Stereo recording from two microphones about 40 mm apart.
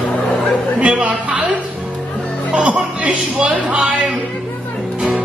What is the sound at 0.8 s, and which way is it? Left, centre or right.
Speech, right.